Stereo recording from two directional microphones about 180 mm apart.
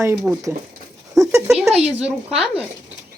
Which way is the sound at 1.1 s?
15° right (ahead or behind).